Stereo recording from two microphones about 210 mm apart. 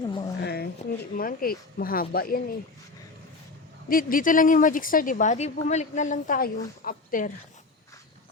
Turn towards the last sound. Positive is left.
turn(degrees=40)  # may be behind; listen again after turning